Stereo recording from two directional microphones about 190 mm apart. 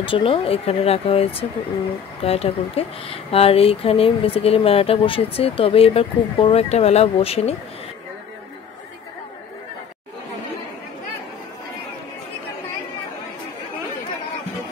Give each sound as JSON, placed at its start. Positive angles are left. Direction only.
{"t": 0.0, "sound": "speech", "side_deg": 25}